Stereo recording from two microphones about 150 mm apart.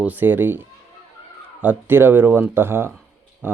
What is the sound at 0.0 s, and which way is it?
Speech, 10° right (ahead or behind).